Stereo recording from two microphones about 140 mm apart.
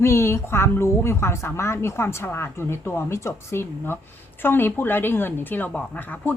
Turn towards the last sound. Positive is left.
turn(degrees=10)  # may be behind; listen again after turning